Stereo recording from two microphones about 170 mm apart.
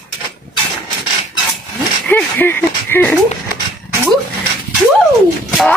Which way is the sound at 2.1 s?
10° left (ahead or behind).